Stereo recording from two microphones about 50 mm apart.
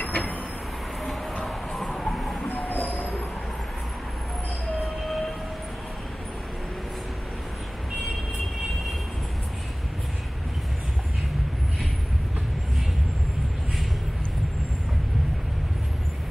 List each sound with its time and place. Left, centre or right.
0.0 s vehicle: left
1.4 s a sound: centre
2.3 s train: left